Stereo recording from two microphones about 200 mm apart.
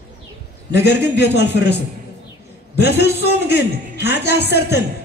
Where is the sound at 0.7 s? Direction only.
55° left (ahead or behind).